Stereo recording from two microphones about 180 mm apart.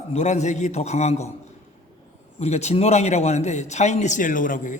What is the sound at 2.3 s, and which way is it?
A man's voice, 35° left (ahead or behind).